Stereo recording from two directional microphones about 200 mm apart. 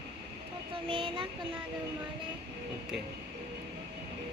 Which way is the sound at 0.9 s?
25° right (ahead or behind).